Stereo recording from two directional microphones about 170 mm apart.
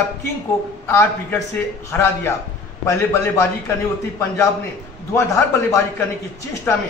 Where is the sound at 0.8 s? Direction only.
15° left (ahead or behind).